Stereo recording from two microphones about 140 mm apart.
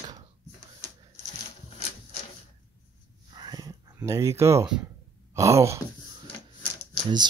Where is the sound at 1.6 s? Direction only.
50° left (ahead or behind).